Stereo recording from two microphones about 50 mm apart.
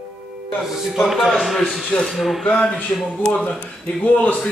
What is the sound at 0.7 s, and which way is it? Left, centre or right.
Speech, centre.